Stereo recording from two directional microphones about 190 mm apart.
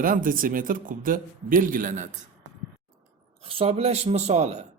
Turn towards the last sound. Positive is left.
turn(degrees=-35)  # may be behind; listen again after turning